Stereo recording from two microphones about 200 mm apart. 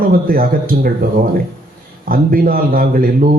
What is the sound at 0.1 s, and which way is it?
Speech, 45° right (ahead or behind).